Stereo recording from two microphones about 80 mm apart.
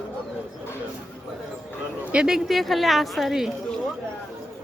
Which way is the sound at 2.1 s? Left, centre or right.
Centre.